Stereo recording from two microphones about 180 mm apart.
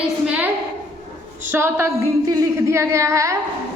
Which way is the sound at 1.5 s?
15° right (ahead or behind).